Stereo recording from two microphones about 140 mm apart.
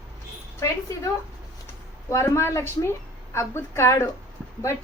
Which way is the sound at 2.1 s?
20° left (ahead or behind).